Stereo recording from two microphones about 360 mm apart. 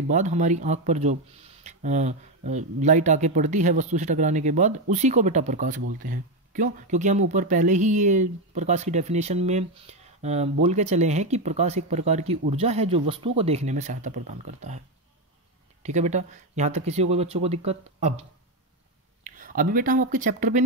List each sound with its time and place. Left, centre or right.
0.1 s speech: centre
15.8 s speech: centre
19.2 s speech: right